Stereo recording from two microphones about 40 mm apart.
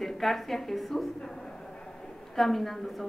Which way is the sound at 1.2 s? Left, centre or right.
Centre.